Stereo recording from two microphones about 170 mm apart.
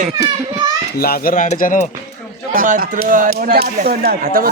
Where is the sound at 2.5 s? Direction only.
55° right (ahead or behind).